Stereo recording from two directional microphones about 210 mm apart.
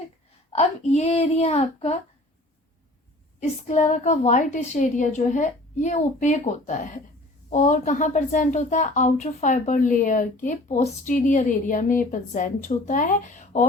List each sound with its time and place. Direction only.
0.5 s speech: 30° left (ahead or behind)
3.7 s speech: 35° left (ahead or behind)